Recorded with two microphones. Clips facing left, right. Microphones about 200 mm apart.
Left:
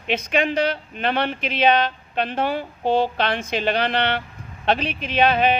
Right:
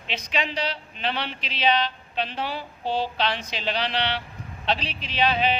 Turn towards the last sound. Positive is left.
turn(degrees=55)  # may be behind; listen again after turning